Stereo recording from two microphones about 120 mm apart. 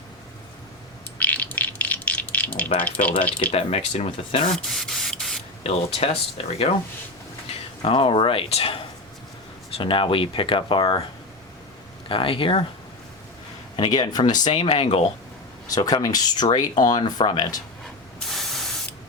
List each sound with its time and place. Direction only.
1.2 s rattle: 15° left (ahead or behind)
2.8 s speech: 10° left (ahead or behind)
3.5 s speech: 55° left (ahead or behind)
4.5 s spray: centre (ahead or behind)
5.6 s speech: 55° left (ahead or behind)
7.8 s speech: 50° left (ahead or behind)
9.7 s speech: 45° left (ahead or behind)
12.0 s speech: 45° left (ahead or behind)
13.7 s speech: 40° left (ahead or behind)
14.4 s speech: 55° left (ahead or behind)
15.7 s speech: 30° left (ahead or behind)
18.3 s spray: centre (ahead or behind)